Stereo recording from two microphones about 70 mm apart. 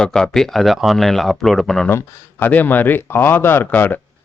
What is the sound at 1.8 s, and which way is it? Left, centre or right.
Speech, left.